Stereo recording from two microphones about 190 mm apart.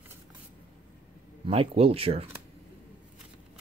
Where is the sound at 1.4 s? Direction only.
30° right (ahead or behind).